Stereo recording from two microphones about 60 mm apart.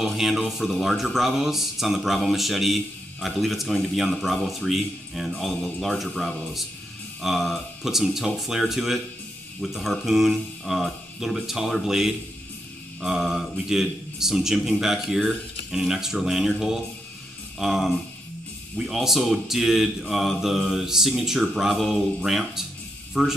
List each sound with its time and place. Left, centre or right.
0.0 s speech: centre